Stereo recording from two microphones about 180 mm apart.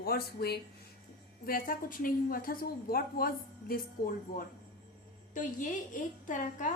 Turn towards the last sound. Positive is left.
turn(degrees=45)  # may be behind; listen again after turning